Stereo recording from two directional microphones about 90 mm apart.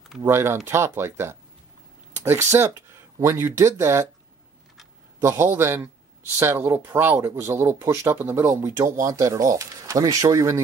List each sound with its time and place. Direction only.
0.2 s speech: 30° right (ahead or behind)
5.2 s speech: 25° right (ahead or behind)